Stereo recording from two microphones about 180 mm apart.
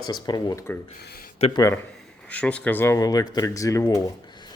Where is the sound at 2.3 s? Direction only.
5° left (ahead or behind).